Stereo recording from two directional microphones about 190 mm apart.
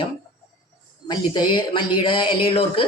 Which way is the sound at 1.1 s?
25° left (ahead or behind).